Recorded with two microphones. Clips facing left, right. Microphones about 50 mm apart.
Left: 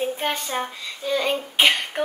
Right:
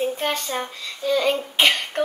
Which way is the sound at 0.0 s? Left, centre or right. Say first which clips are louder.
Right 1 dB; centre.